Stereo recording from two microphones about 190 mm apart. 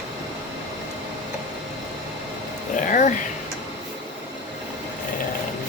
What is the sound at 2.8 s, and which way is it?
Speech, 45° left (ahead or behind).